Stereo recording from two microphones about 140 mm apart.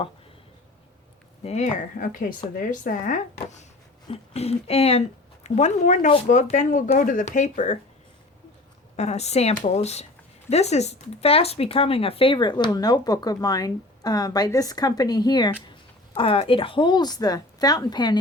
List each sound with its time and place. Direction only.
1.5 s speech: 55° left (ahead or behind); by 3.2 s 70° left (ahead or behind)
3.4 s a woman's voice: 55° left (ahead or behind)
9.0 s a woman's voice: 50° left (ahead or behind); by 18.2 s 30° left (ahead or behind)